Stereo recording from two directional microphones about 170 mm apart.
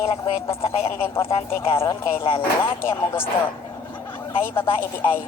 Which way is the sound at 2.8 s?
15° left (ahead or behind).